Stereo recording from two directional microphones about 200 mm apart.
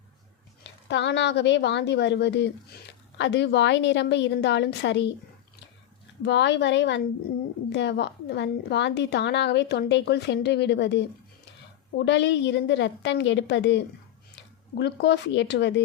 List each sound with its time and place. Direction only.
0.6 s a woman's voice: 65° left (ahead or behind)
6.2 s a woman's voice: 60° left (ahead or behind)